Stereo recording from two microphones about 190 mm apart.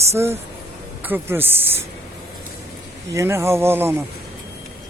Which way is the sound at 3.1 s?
15° right (ahead or behind).